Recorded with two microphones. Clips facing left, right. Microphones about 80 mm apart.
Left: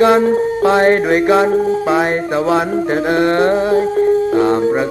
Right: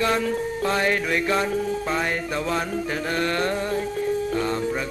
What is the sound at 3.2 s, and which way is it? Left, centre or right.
Mantra, left.